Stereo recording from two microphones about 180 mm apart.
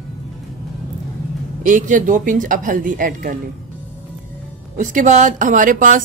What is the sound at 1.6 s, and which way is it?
Speech, 45° right (ahead or behind).